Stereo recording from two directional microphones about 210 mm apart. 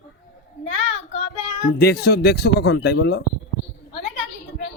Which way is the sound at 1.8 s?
50° left (ahead or behind).